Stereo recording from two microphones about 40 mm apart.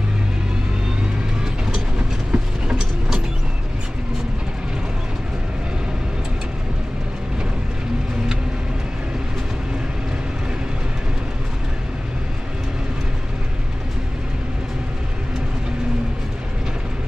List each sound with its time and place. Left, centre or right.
2.3 s vehicle: right